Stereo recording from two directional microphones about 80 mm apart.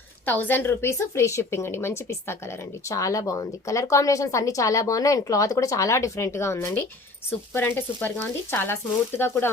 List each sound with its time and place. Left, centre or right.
0.3 s a woman's voice: left